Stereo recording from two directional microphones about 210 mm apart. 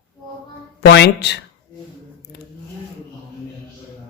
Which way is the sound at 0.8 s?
50° left (ahead or behind).